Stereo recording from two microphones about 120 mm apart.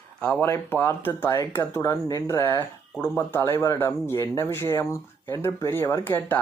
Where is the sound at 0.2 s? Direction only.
10° left (ahead or behind).